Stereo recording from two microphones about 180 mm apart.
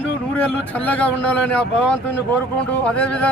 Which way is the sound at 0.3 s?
10° left (ahead or behind).